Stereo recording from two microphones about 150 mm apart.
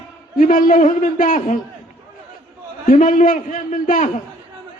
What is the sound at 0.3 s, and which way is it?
A man's voice, 60° left (ahead or behind).